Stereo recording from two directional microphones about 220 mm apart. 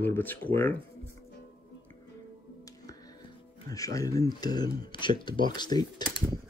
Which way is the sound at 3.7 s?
15° left (ahead or behind).